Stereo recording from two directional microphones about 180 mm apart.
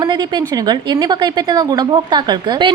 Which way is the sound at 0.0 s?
25° right (ahead or behind).